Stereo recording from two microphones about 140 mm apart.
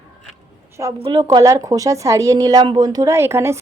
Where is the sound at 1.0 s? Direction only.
30° right (ahead or behind).